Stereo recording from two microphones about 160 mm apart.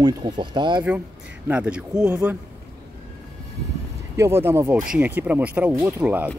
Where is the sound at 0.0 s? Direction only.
30° right (ahead or behind).